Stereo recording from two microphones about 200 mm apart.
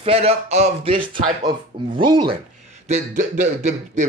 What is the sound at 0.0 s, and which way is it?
Speech, 30° right (ahead or behind).